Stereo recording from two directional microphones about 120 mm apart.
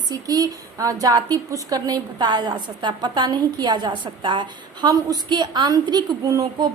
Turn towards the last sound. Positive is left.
turn(degrees=-30)  # may be behind; listen again after turning